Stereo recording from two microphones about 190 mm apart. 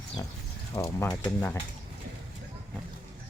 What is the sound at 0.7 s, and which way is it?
Speech, 15° left (ahead or behind).